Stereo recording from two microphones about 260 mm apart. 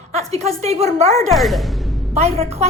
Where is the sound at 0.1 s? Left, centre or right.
Right.